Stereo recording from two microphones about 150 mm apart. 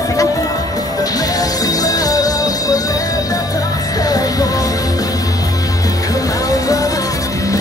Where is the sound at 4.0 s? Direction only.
25° left (ahead or behind).